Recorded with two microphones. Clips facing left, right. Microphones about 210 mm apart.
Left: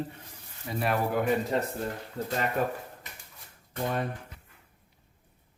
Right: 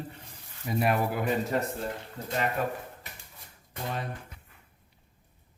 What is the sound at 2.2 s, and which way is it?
Speech, 40° left (ahead or behind).